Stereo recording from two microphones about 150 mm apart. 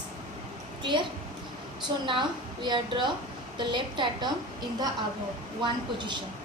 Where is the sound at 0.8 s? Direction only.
30° right (ahead or behind).